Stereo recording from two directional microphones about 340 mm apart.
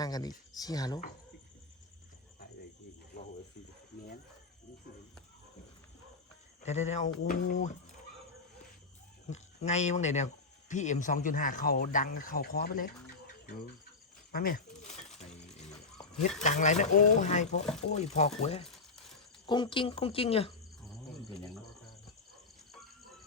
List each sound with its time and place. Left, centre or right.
0.0 s speech: centre
6.6 s speech: centre
9.3 s speech: centre
14.3 s a sound: left
16.4 s speech: left
20.8 s insect: centre
21.2 s a sound: centre
22.7 s cricket: centre